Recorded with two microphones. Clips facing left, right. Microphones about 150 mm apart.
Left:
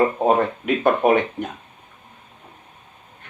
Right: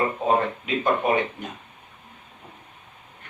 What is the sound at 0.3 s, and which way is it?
Speech, 60° left (ahead or behind).